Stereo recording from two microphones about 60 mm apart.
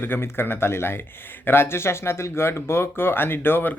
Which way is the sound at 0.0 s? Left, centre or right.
Left.